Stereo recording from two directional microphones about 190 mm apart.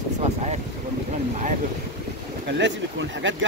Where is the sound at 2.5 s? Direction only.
65° right (ahead or behind).